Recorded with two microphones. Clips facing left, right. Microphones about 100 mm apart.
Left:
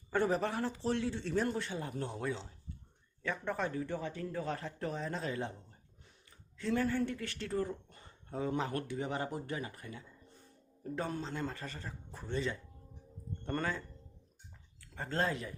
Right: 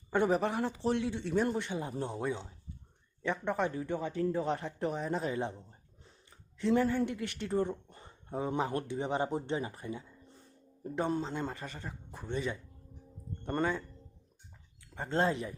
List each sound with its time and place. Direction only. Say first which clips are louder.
0.1 s speech: right 3 dB; 20° right (ahead or behind)
14.9 s speech: right 4 dB; 20° right (ahead or behind)